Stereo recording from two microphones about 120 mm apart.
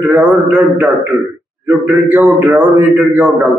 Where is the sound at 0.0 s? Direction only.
10° right (ahead or behind).